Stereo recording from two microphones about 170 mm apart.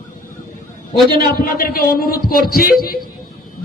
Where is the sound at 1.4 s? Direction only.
60° left (ahead or behind).